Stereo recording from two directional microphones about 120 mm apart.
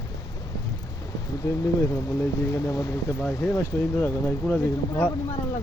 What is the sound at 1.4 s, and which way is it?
Speech, 25° left (ahead or behind).